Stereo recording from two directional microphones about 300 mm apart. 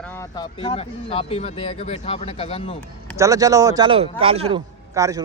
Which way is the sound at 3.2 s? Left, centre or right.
Centre.